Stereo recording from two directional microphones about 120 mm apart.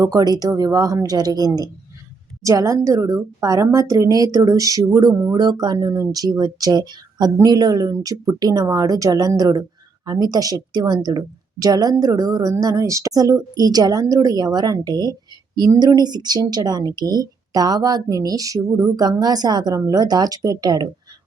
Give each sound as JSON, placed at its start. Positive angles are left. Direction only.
{"t": 0.0, "sound": "a woman's voice", "side_deg": -30}